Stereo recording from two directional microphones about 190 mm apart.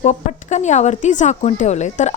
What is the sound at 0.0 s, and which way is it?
Speech, 40° left (ahead or behind).